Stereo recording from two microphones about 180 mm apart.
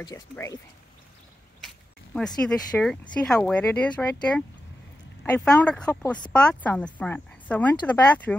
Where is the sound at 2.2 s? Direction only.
5° left (ahead or behind).